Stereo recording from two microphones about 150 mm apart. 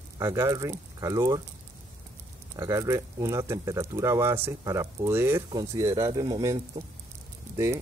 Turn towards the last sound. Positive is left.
turn(degrees=-20)  # may be behind; listen again after turning